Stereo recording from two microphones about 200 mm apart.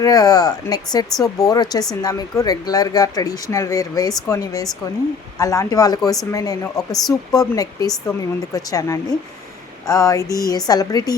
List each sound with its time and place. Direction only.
0.0 s speech: 20° left (ahead or behind)